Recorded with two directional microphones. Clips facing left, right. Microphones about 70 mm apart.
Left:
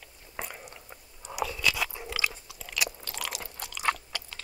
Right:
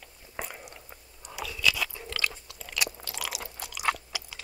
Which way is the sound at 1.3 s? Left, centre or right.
Left.